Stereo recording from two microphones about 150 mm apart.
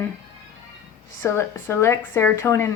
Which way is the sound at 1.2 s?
15° left (ahead or behind).